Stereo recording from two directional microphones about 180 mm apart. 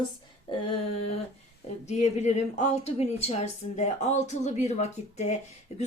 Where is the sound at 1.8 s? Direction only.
40° left (ahead or behind).